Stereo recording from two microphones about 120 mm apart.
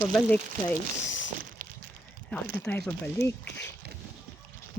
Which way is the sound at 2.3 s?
10° left (ahead or behind).